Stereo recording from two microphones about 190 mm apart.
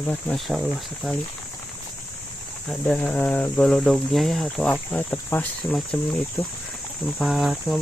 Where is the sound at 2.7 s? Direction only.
5° left (ahead or behind).